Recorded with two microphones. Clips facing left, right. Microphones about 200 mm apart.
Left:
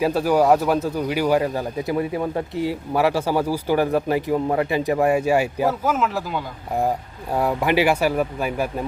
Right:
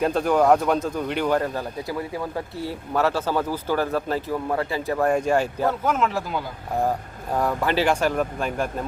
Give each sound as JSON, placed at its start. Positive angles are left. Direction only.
{"t": 0.0, "sound": "speech", "side_deg": 5}
{"t": 1.9, "sound": "speech", "side_deg": 20}
{"t": 7.3, "sound": "speech", "side_deg": 10}